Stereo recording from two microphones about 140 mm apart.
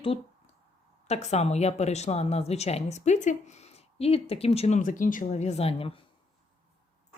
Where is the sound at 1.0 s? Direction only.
50° left (ahead or behind).